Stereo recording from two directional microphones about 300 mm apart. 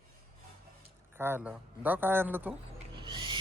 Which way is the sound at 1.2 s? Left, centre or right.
Centre.